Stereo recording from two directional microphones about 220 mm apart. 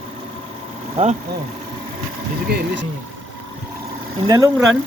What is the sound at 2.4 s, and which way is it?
Speech, 50° right (ahead or behind).